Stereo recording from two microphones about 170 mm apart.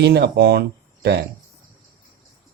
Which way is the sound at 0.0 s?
75° right (ahead or behind).